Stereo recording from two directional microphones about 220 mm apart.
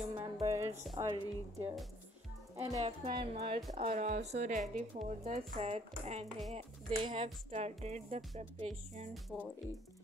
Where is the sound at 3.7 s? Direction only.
30° right (ahead or behind).